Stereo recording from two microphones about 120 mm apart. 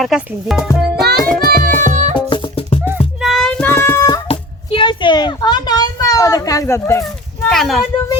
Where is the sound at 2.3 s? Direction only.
50° left (ahead or behind).